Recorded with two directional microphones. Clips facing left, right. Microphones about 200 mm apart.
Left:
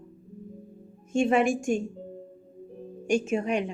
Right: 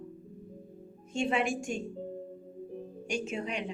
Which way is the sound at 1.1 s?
45° left (ahead or behind).